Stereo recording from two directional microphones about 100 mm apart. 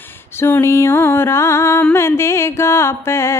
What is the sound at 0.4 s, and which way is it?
Music, 25° left (ahead or behind).